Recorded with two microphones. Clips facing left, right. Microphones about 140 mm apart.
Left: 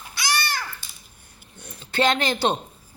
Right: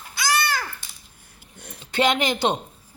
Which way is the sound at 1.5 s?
90° right.